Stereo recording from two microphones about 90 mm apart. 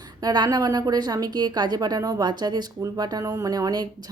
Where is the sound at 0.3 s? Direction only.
50° right (ahead or behind).